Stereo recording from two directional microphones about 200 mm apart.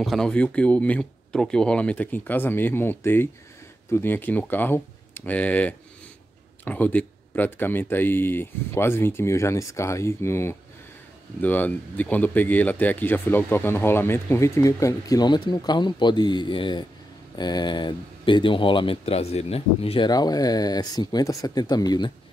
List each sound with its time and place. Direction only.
0.0 s speech: centre (ahead or behind); by 22.1 s 20° left (ahead or behind)